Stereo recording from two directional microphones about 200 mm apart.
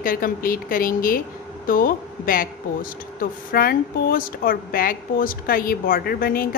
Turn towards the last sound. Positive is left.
turn(degrees=45)  # may be behind; listen again after turning